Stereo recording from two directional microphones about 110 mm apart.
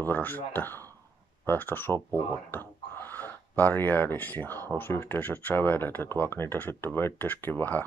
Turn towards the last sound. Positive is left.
turn(degrees=15)  # may be behind; listen again after turning